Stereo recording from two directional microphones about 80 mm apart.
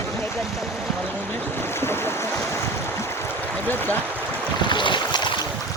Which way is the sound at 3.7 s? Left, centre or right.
Left.